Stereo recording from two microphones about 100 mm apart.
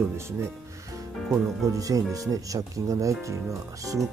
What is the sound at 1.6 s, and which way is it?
Speech, 35° right (ahead or behind).